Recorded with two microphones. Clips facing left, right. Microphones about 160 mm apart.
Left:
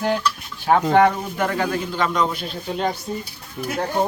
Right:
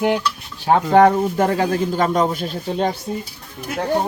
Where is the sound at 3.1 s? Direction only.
15° right (ahead or behind).